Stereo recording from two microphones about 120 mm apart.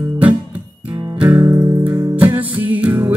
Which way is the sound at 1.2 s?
25° right (ahead or behind).